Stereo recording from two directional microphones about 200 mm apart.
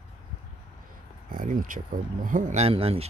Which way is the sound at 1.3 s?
45° right (ahead or behind).